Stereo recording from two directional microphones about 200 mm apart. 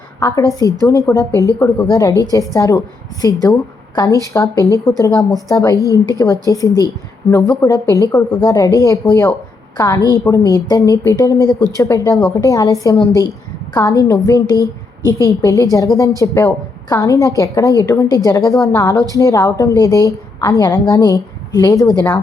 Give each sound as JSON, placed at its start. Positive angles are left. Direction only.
{"t": 0.2, "sound": "a woman's voice", "side_deg": 15}
{"t": 18.5, "sound": "a woman's voice", "side_deg": 0}
{"t": 18.8, "sound": "a woman's voice", "side_deg": 15}
{"t": 21.8, "sound": "a woman's voice", "side_deg": 5}